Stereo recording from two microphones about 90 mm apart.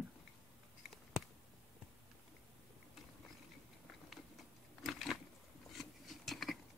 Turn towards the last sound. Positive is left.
turn(degrees=0)  # may be behind; listen again after turning